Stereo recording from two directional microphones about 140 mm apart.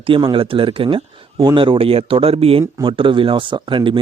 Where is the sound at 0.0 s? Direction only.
35° right (ahead or behind).